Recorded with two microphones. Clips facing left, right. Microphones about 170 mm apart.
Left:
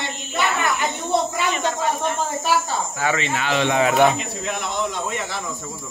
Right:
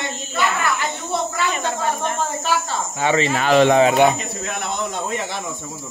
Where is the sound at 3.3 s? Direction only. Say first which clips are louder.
Right 8 dB; 45° right (ahead or behind).